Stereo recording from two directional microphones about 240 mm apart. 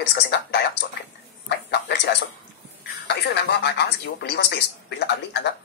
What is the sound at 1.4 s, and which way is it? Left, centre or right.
A man's voice, left.